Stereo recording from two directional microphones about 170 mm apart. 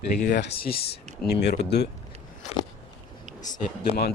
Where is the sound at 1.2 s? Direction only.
90° left.